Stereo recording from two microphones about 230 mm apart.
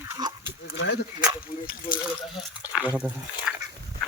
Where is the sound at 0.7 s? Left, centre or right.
Left.